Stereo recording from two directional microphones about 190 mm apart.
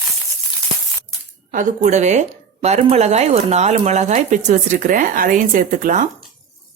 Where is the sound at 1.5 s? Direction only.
40° right (ahead or behind).